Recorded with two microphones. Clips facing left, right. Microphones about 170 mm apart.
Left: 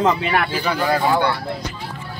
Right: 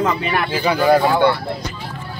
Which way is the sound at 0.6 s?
15° right (ahead or behind).